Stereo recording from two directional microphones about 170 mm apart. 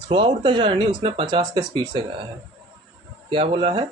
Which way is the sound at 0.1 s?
30° right (ahead or behind).